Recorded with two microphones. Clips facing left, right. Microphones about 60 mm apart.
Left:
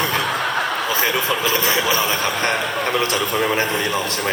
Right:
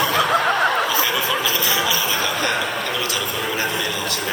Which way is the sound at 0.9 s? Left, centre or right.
Left.